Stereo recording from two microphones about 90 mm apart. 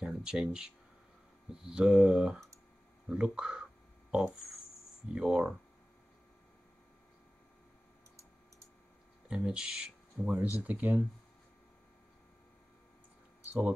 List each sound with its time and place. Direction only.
0.1 s speech: 5° right (ahead or behind)
5.0 s speech: 10° right (ahead or behind)
9.3 s speech: 10° right (ahead or behind)
13.5 s speech: 15° right (ahead or behind)